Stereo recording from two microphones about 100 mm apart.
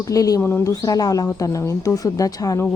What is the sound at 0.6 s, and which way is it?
Speech, 35° left (ahead or behind).